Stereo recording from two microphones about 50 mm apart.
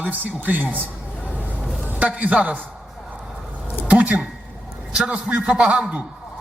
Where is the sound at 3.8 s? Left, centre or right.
Right.